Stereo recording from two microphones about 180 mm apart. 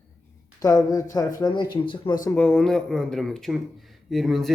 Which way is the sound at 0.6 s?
20° left (ahead or behind).